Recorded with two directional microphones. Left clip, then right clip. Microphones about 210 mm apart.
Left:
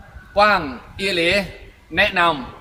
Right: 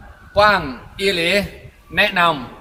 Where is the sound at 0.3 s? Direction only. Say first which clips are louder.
Right 1 dB; 15° right (ahead or behind).